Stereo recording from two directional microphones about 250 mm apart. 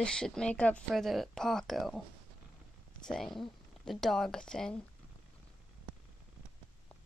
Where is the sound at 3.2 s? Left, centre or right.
Centre.